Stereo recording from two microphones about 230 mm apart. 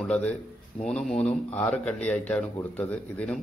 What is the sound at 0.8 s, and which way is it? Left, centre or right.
Speech, centre.